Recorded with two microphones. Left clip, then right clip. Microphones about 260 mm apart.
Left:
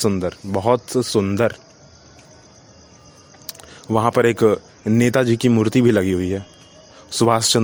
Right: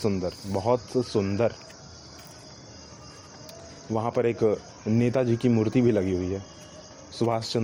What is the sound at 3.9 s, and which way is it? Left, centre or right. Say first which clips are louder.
Speech: left 9 dB; left.